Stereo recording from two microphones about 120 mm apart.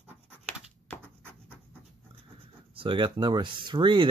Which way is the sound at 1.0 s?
15° right (ahead or behind).